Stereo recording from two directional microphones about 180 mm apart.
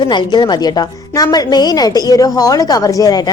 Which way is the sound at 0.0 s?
25° left (ahead or behind).